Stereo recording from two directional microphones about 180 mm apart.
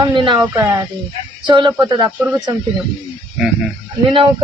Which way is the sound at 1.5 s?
25° right (ahead or behind).